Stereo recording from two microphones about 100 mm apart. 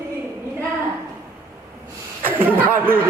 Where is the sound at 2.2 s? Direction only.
20° right (ahead or behind).